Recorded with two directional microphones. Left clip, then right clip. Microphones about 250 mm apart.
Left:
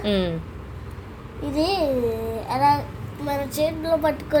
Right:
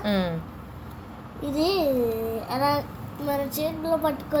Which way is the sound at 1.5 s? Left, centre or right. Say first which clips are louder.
Left 1 dB; left.